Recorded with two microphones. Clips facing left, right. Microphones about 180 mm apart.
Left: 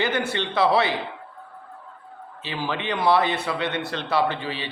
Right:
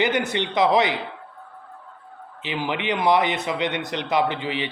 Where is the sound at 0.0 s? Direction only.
20° right (ahead or behind).